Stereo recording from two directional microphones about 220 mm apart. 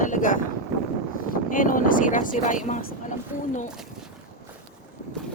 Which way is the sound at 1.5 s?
40° left (ahead or behind).